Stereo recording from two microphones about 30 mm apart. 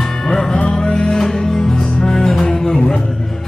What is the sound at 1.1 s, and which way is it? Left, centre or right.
Music, centre.